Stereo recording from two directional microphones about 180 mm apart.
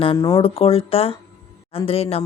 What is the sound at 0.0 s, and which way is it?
Speech, 25° left (ahead or behind).